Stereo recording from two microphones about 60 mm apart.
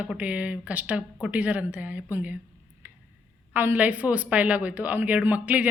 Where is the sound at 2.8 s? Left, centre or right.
Right.